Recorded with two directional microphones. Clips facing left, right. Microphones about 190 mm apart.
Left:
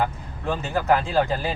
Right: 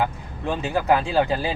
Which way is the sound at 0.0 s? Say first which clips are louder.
Right 1 dB; 15° right (ahead or behind).